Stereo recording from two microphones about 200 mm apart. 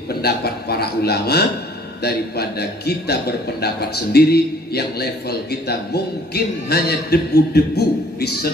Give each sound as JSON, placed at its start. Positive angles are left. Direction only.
{"t": 0.1, "sound": "a man's voice", "side_deg": 50}